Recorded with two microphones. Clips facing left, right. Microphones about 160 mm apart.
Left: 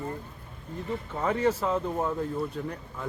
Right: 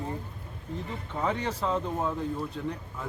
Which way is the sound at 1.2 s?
5° left (ahead or behind).